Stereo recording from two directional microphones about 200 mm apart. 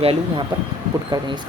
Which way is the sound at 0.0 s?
30° right (ahead or behind).